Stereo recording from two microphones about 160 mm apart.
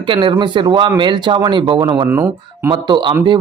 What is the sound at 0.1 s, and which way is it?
A man's voice, 30° right (ahead or behind).